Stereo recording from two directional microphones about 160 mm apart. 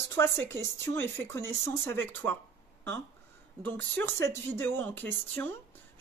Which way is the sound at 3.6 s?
10° left (ahead or behind).